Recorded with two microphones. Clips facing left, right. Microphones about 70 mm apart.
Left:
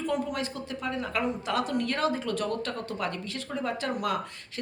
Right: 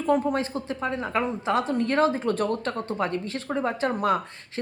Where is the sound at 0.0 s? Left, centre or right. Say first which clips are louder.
Right 6 dB; right.